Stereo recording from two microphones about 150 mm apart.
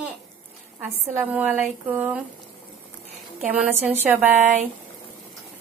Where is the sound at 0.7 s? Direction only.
10° right (ahead or behind).